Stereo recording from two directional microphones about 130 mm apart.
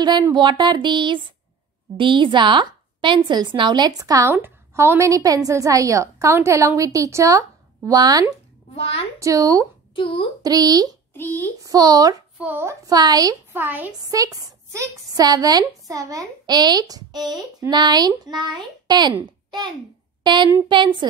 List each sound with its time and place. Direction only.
0.0 s a woman's voice: 35° right (ahead or behind)
8.7 s a child's voice: 50° left (ahead or behind)
9.2 s a woman's voice: 25° right (ahead or behind)
11.1 s a child's voice: 15° left (ahead or behind)
11.6 s a woman's voice: 30° right (ahead or behind)
12.4 s a woman's voice: 15° right (ahead or behind)
13.5 s a woman's voice: 15° right (ahead or behind)
14.1 s a woman's voice: 25° right (ahead or behind)